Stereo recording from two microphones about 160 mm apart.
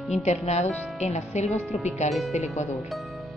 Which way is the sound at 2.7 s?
Centre (ahead or behind).